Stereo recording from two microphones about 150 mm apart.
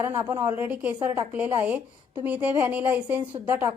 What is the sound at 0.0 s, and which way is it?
Speech, 15° right (ahead or behind).